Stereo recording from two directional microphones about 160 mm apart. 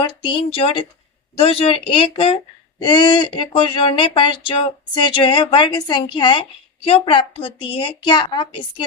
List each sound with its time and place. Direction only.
0.0 s speech: 30° left (ahead or behind)